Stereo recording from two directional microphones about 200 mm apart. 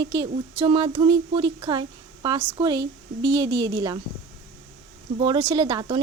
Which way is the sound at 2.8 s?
60° right (ahead or behind).